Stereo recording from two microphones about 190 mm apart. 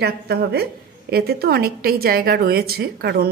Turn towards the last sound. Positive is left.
turn(degrees=-55)  # may be behind; listen again after turning